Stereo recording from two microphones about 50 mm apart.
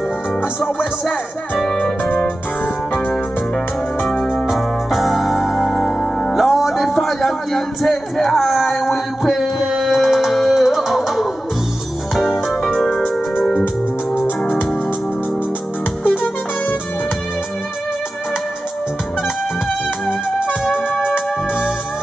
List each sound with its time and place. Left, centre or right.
0.4 s music: left
2.1 s keyboard: left
3.1 s music: centre
12.4 s music: centre
13.4 s organ: centre
16.0 s music: left